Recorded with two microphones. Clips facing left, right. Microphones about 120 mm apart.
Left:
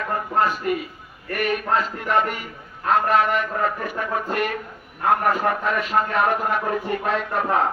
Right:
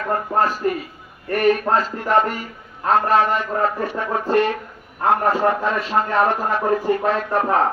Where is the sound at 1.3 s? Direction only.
35° right (ahead or behind).